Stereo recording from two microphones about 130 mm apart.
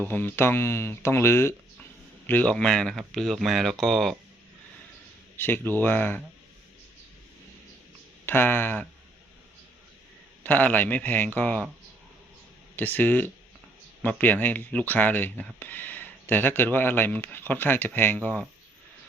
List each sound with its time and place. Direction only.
0.0 s speech: 15° left (ahead or behind)
5.4 s speech: 15° left (ahead or behind)
8.3 s speech: 15° left (ahead or behind)
10.4 s speech: 15° left (ahead or behind)
12.7 s speech: 15° left (ahead or behind)